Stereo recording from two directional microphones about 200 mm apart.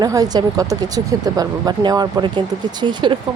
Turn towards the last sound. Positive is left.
turn(degrees=-25)  # may be behind; listen again after turning